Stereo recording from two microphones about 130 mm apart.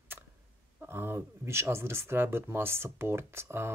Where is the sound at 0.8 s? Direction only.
15° right (ahead or behind).